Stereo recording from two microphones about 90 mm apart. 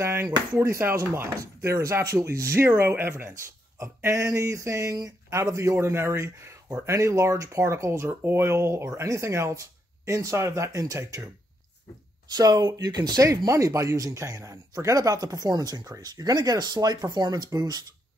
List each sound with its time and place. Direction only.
0.0 s speech: 25° right (ahead or behind)
12.3 s speech: 45° right (ahead or behind)